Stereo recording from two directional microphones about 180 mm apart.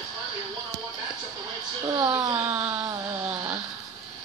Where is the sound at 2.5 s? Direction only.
10° right (ahead or behind).